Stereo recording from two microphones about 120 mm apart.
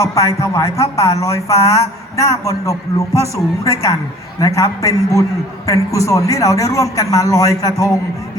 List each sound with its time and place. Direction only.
0.0 s speech: 25° left (ahead or behind)